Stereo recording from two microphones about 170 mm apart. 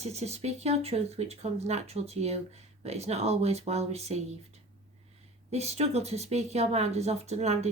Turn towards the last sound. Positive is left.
turn(degrees=-40)  # may be behind; listen again after turning